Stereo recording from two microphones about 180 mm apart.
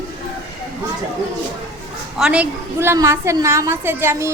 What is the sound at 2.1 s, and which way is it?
A woman's voice, 5° right (ahead or behind).